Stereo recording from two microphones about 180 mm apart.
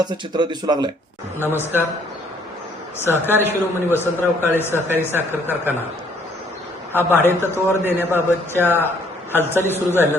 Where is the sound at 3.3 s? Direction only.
10° right (ahead or behind).